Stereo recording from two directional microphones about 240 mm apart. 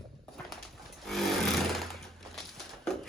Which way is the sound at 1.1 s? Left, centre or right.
Centre.